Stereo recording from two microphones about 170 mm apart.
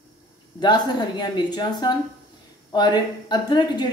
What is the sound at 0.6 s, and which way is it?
Speech, 25° left (ahead or behind).